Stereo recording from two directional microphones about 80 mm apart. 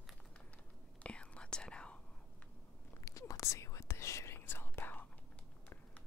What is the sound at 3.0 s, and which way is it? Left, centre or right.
Whispering, left.